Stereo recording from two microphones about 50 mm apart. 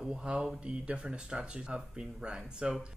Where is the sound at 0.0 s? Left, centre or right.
Centre.